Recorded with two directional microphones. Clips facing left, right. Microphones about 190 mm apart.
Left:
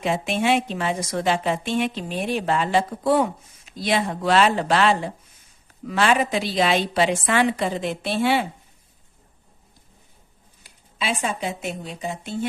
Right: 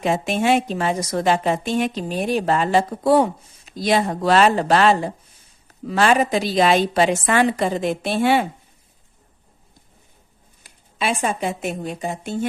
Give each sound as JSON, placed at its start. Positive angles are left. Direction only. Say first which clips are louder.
{"t": 0.0, "sound": "a woman's voice", "louder": "right 3 dB", "side_deg": -45}
{"t": 10.9, "sound": "a woman's voice", "louder": "right 4 dB", "side_deg": -50}